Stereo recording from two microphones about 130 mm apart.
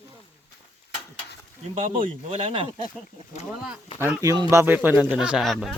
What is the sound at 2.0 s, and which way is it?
Speech, 50° right (ahead or behind).